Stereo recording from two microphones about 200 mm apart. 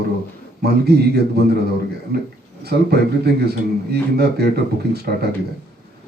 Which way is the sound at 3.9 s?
55° right (ahead or behind).